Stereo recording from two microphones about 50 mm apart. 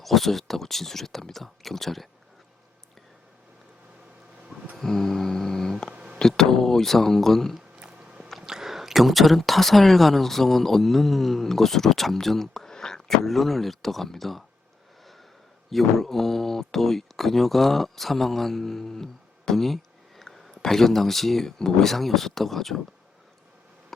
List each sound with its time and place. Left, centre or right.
0.0 s speech: centre
4.8 s music: centre
5.9 s a sound: right
6.1 s speech: centre
7.8 s a sound: right
8.4 s speech: centre
15.7 s speech: centre